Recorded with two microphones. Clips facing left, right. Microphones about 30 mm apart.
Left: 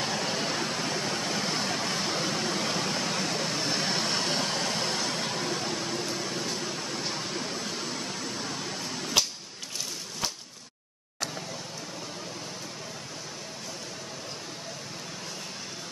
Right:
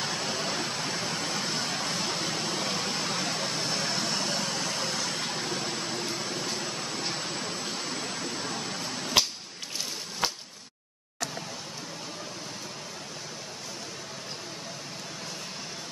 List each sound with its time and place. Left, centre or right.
0.0 s vehicle: centre
3.6 s vehicle: centre
5.0 s vehicle: centre